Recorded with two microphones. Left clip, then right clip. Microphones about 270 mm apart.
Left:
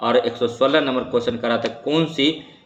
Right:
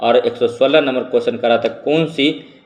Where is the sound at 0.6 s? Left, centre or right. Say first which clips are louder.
Right 4 dB; centre.